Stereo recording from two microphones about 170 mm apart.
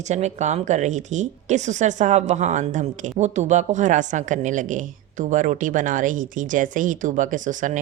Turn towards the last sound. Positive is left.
turn(degrees=-50)  # may be behind; listen again after turning